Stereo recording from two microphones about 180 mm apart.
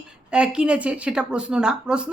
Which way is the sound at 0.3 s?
5° right (ahead or behind).